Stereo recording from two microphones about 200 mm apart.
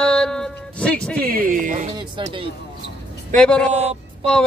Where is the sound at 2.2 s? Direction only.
25° right (ahead or behind).